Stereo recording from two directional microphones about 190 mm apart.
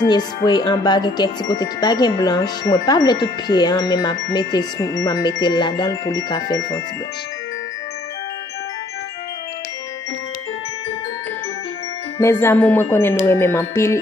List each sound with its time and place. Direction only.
0.0 s speech: 20° left (ahead or behind)
12.2 s music: 15° left (ahead or behind)